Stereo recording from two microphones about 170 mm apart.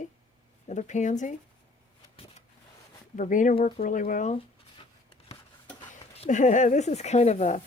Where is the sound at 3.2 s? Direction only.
50° left (ahead or behind).